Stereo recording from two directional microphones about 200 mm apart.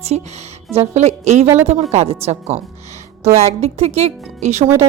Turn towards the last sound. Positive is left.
turn(degrees=-35)  # may be behind; listen again after turning